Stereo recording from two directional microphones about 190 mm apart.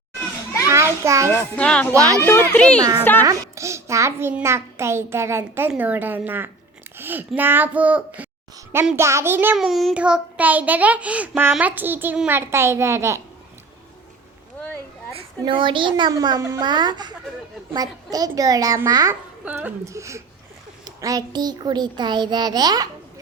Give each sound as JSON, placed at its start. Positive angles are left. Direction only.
{"t": 0.7, "sound": "a sound", "side_deg": -15}
{"t": 1.3, "sound": "a child's voice", "side_deg": 10}
{"t": 1.9, "sound": "a child's voice", "side_deg": -15}
{"t": 2.2, "sound": "a child's voice", "side_deg": 10}
{"t": 3.2, "sound": "a child's voice", "side_deg": -15}
{"t": 15.1, "sound": "a child's voice", "side_deg": -25}